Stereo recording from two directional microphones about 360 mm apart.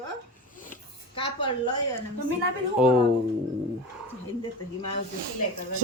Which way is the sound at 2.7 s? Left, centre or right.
Centre.